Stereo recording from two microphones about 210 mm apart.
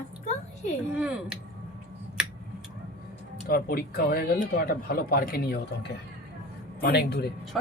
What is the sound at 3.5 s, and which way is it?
Speech, 45° left (ahead or behind).